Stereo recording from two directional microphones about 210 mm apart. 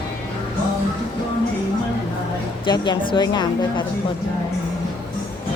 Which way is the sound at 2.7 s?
20° left (ahead or behind).